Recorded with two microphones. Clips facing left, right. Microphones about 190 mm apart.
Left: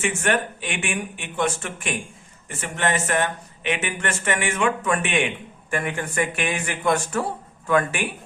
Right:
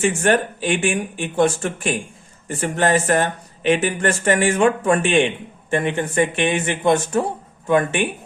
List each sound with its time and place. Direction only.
0.0 s a man's voice: 35° right (ahead or behind)